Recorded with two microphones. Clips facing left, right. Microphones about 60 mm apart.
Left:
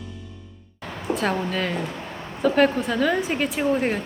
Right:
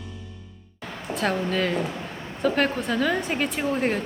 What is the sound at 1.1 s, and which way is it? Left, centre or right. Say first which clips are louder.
A woman's voice: even; centre.